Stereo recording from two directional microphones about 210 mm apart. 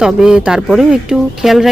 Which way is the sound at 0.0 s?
5° right (ahead or behind).